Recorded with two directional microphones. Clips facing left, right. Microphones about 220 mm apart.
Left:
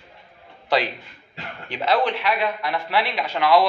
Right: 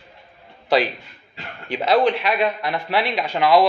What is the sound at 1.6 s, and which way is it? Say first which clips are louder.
Speech: right 4 dB; 10° right (ahead or behind).